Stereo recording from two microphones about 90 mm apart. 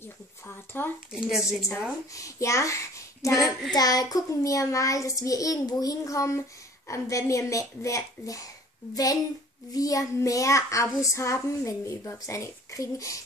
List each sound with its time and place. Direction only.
0.8 s speech: 25° left (ahead or behind)
1.1 s a woman's voice: 5° right (ahead or behind)
2.1 s a child's voice: 35° left (ahead or behind)
3.7 s child singing: 45° left (ahead or behind)